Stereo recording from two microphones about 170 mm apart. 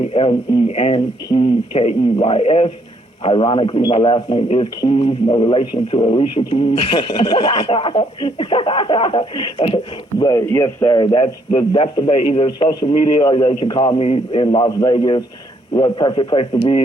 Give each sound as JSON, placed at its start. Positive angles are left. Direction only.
{"t": 0.0, "sound": "speech", "side_deg": 35}
{"t": 10.2, "sound": "a man's voice", "side_deg": 20}
{"t": 12.5, "sound": "a man's voice", "side_deg": 25}